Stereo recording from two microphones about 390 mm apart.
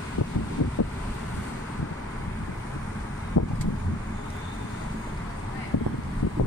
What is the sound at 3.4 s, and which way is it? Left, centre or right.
Vehicle, left.